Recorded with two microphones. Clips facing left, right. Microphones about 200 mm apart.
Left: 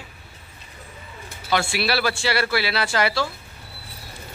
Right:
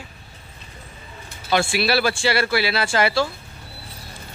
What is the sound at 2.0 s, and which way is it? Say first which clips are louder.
A man's voice: right 2 dB; 25° right (ahead or behind).